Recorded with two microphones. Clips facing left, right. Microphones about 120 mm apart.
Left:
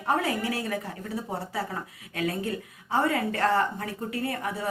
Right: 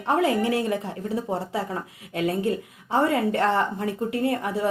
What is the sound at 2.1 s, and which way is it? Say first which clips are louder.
Speech: right 5 dB; 25° right (ahead or behind).